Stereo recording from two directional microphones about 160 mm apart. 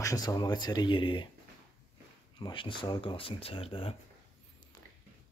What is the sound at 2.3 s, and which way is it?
Speech, 30° left (ahead or behind).